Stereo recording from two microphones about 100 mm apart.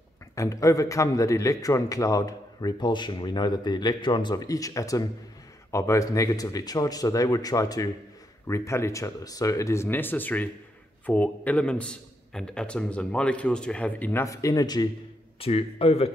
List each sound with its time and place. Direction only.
0.4 s a man's voice: 35° left (ahead or behind); by 14.2 s 15° left (ahead or behind)
14.2 s a man's voice: 35° left (ahead or behind)
15.4 s speech: 85° left